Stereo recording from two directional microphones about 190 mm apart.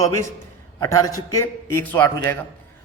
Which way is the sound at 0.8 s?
20° left (ahead or behind).